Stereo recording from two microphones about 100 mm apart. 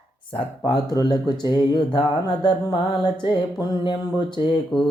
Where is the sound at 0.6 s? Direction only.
40° left (ahead or behind).